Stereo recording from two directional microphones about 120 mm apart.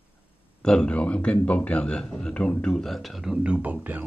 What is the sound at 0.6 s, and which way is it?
A man's voice, 5° left (ahead or behind).